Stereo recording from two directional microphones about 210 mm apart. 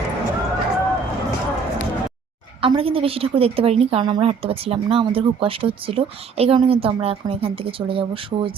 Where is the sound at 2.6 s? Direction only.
25° right (ahead or behind).